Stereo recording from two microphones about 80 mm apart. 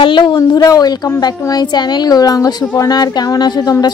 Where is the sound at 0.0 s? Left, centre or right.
Left.